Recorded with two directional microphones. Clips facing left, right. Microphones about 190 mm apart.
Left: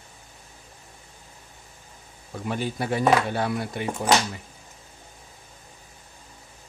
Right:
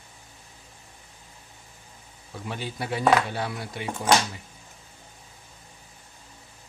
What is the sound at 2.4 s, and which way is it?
Speech, 50° left (ahead or behind).